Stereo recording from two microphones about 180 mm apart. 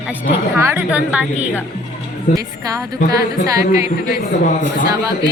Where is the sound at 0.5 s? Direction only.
15° right (ahead or behind).